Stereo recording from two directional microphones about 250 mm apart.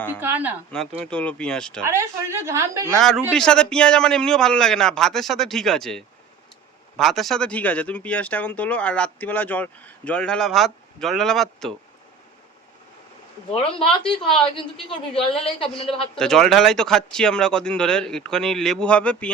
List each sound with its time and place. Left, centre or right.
0.2 s a woman's voice: centre
0.7 s speech: centre
1.8 s a woman's voice: centre
2.9 s speech: centre
13.5 s a woman's voice: left
16.1 s speech: centre